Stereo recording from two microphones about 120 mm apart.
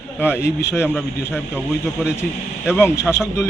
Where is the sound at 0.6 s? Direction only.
20° left (ahead or behind).